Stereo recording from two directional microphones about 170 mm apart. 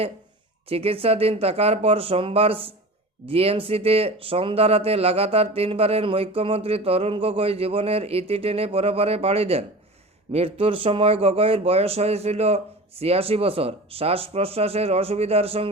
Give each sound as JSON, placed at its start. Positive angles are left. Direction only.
{"t": 0.7, "sound": "speech", "side_deg": -35}